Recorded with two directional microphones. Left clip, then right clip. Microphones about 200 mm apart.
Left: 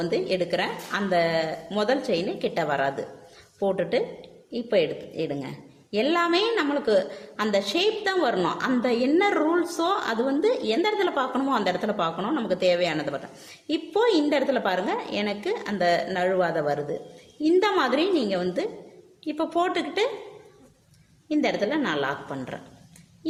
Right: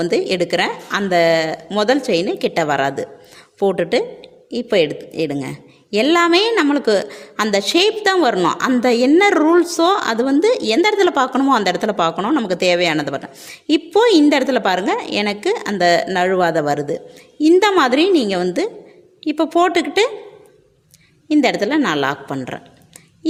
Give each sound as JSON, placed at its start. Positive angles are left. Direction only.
{"t": 0.0, "sound": "a woman's voice", "side_deg": -50}
{"t": 21.2, "sound": "a woman's voice", "side_deg": -50}